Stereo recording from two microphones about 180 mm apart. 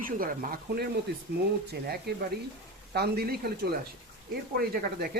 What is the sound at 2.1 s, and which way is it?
Speech, 60° right (ahead or behind).